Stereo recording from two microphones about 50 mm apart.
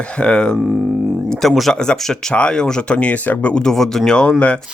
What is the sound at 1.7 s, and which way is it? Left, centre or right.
Speech, centre.